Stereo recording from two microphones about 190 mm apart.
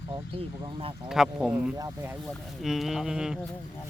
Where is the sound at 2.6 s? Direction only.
Centre (ahead or behind).